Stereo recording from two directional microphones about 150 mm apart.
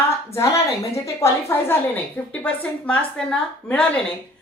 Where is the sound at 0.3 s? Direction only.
20° left (ahead or behind).